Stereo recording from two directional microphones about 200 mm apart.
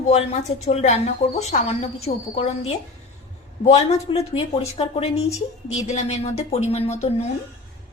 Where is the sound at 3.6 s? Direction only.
30° left (ahead or behind).